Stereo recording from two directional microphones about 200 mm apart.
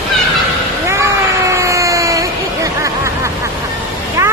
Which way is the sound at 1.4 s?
15° right (ahead or behind).